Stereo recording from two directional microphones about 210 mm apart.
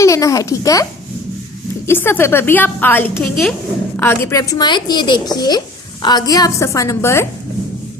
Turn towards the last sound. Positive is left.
turn(degrees=10)  # may be behind; listen again after turning